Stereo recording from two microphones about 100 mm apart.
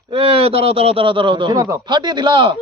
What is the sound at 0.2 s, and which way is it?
A man's voice, 70° right (ahead or behind).